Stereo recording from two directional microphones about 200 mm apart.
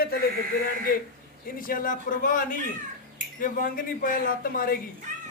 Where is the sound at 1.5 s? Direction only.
45° left (ahead or behind).